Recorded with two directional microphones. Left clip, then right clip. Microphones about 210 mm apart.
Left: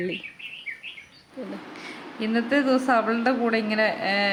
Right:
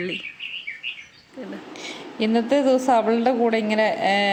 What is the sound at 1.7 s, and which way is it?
A woman's voice, 20° right (ahead or behind).